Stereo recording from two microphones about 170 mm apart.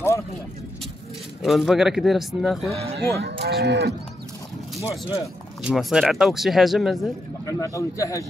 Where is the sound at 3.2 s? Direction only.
80° right.